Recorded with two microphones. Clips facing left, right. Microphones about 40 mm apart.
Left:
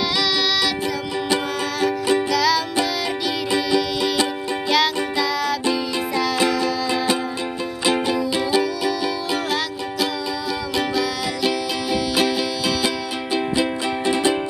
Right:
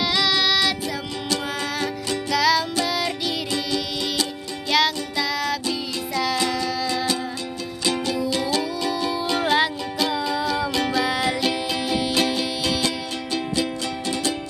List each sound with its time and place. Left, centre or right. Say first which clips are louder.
2.3 s music: right 4 dB; centre
3.5 s music: left 6 dB; centre
4.6 s music: left 1 dB; centre
6.6 s music: left 3 dB; left
11.4 s music: left 2 dB; centre
13.3 s music: left 4 dB; centre